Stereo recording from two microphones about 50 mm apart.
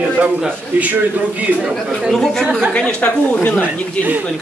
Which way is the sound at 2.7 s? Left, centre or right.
Centre.